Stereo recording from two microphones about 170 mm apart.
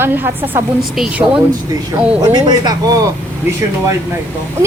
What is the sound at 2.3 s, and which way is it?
Speech, 25° right (ahead or behind).